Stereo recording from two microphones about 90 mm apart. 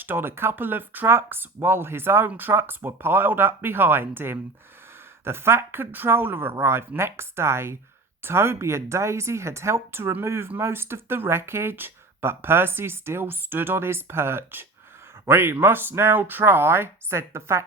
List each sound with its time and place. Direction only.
0.0 s speech: 25° right (ahead or behind)